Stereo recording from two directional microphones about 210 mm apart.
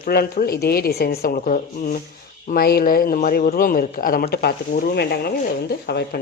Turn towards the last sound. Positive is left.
turn(degrees=50)  # may be behind; listen again after turning